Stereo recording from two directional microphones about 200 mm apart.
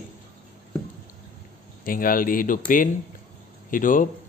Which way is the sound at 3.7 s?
40° left (ahead or behind).